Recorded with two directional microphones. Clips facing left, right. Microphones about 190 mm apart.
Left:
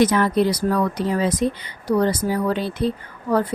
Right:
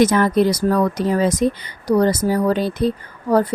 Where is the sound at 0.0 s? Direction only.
45° right (ahead or behind).